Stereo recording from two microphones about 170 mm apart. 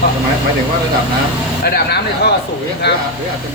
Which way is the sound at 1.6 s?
70° left (ahead or behind).